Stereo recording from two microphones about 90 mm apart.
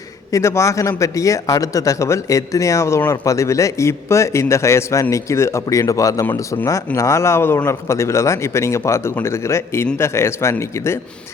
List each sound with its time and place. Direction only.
0.3 s a man's voice: 35° left (ahead or behind)